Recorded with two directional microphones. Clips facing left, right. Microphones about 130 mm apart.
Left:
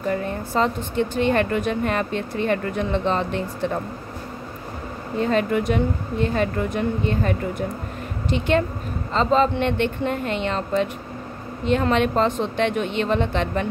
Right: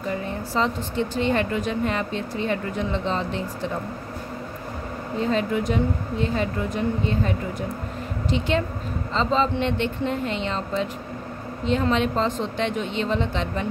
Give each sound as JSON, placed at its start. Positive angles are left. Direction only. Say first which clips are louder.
{"t": 0.1, "sound": "speech", "louder": "left 2 dB", "side_deg": 55}
{"t": 5.3, "sound": "speech", "louder": "left 3 dB", "side_deg": 60}